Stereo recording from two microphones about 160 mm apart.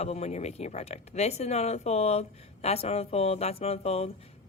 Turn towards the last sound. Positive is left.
turn(degrees=40)  # may be behind; listen again after turning